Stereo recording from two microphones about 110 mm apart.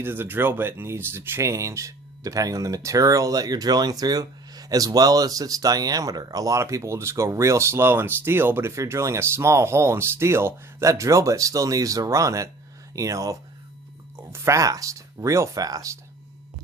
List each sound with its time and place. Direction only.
0.0 s speech: 20° right (ahead or behind)